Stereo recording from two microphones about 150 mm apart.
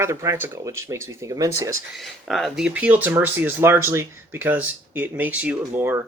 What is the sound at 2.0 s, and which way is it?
Speech, centre (ahead or behind).